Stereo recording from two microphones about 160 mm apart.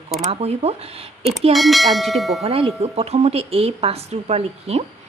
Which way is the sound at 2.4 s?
35° right (ahead or behind).